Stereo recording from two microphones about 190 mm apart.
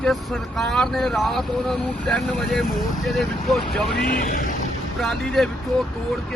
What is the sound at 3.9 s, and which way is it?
Music, 50° left (ahead or behind).